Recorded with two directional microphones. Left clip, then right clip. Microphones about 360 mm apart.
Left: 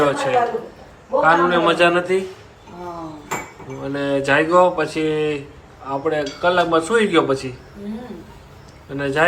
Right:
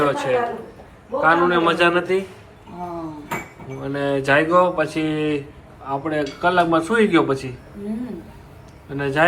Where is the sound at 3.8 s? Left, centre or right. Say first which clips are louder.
Left 1 dB; centre.